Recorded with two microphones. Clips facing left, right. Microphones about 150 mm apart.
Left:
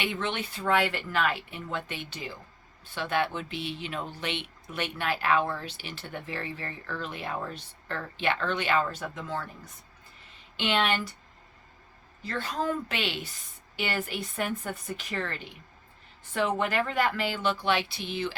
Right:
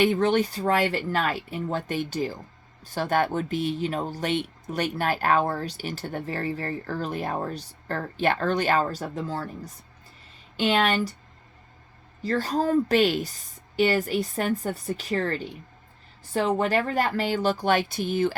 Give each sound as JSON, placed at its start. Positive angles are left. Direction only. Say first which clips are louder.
{"t": 0.0, "sound": "speech", "louder": "right 11 dB", "side_deg": -40}
{"t": 12.2, "sound": "speech", "louder": "right 6 dB", "side_deg": -40}